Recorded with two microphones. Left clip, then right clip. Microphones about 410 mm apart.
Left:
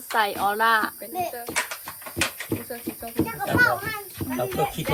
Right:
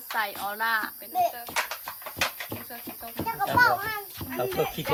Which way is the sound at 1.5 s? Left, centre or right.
Right.